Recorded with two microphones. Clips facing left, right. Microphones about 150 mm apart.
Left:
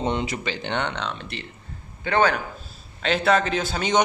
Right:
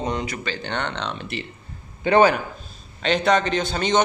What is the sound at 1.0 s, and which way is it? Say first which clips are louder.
A man's voice: right 2 dB; 5° right (ahead or behind).